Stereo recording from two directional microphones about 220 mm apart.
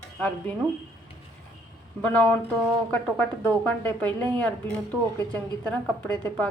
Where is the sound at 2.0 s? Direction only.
5° left (ahead or behind).